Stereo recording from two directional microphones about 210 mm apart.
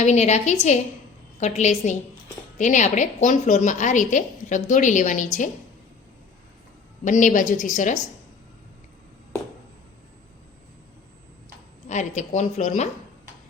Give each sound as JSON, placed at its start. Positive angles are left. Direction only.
{"t": 0.0, "sound": "a woman's voice", "side_deg": 35}
{"t": 7.0, "sound": "a woman's voice", "side_deg": 35}
{"t": 11.9, "sound": "a woman's voice", "side_deg": 35}